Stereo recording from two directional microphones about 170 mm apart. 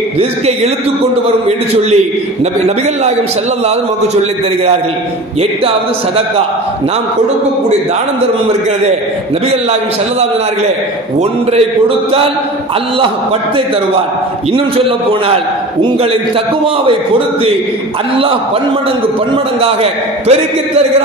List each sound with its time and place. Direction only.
15.2 s a man's voice: 35° right (ahead or behind)
19.6 s a man's voice: 35° right (ahead or behind)